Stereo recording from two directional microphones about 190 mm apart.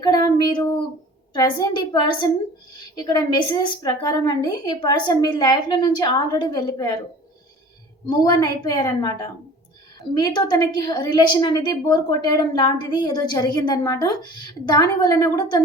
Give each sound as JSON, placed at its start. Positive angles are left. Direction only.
{"t": 0.0, "sound": "a sound", "side_deg": 20}
{"t": 1.3, "sound": "a woman's voice", "side_deg": 20}
{"t": 8.2, "sound": "a woman's voice", "side_deg": 20}
{"t": 10.2, "sound": "a woman's voice", "side_deg": 20}